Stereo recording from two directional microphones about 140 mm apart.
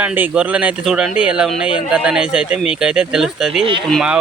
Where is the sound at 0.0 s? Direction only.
10° right (ahead or behind).